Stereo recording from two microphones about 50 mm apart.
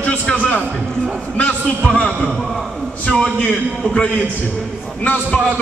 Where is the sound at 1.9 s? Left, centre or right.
Left.